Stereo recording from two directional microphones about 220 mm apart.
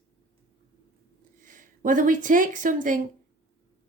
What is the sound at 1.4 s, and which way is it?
Speech, 40° right (ahead or behind).